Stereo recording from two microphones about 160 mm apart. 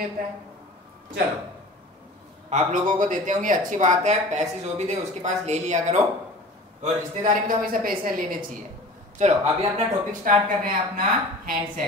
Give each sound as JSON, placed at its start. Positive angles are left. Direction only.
{"t": 2.5, "sound": "speech", "side_deg": -55}
{"t": 9.2, "sound": "speech", "side_deg": -45}
{"t": 10.6, "sound": "speech", "side_deg": -60}